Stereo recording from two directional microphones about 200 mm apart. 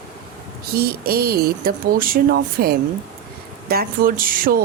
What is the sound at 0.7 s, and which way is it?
Speech, 50° right (ahead or behind).